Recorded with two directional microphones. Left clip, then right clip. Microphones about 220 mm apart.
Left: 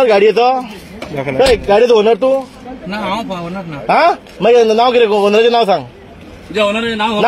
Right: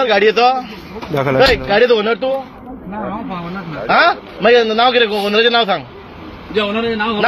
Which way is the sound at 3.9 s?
50° left (ahead or behind).